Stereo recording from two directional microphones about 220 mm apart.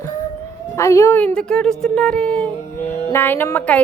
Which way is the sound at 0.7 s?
15° left (ahead or behind).